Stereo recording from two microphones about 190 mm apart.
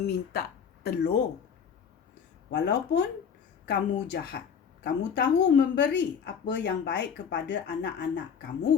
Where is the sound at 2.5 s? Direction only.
65° left (ahead or behind).